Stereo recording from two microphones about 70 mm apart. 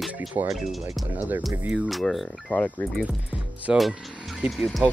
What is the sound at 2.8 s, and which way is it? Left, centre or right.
Speech, left.